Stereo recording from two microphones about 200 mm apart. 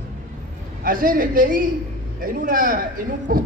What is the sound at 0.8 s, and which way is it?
A woman's voice, 45° right (ahead or behind).